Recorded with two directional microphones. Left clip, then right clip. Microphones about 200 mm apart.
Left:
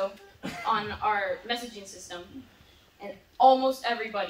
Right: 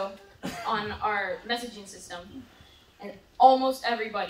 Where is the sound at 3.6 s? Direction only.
5° right (ahead or behind).